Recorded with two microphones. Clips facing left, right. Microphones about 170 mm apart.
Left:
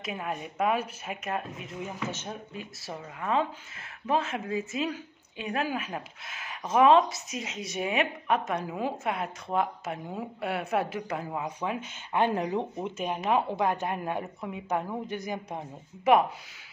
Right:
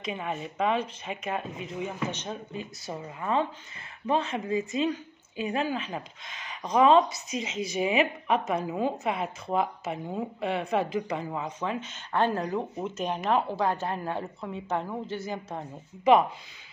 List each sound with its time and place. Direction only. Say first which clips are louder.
0.0 s speech: right 1 dB; 5° left (ahead or behind)
13.6 s speech: even; 15° left (ahead or behind)